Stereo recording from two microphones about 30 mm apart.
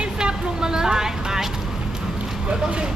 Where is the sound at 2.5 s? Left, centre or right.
Right.